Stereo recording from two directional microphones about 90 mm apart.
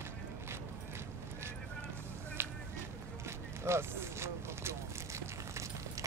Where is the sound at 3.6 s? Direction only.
30° right (ahead or behind).